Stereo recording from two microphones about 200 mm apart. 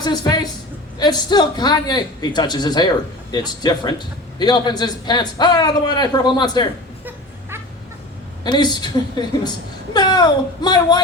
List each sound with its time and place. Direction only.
0.0 s a man's voice: 20° left (ahead or behind)
8.4 s a man's voice: 20° left (ahead or behind)